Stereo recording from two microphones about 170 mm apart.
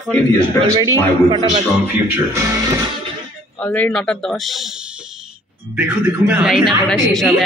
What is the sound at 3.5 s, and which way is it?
A man's voice, 10° left (ahead or behind).